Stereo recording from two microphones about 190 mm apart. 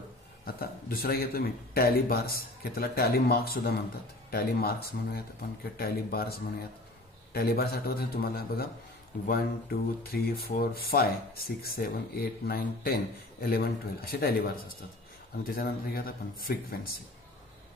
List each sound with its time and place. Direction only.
0.6 s speech: 50° left (ahead or behind)